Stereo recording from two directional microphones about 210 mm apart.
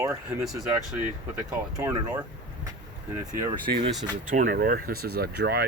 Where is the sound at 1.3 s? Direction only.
15° right (ahead or behind).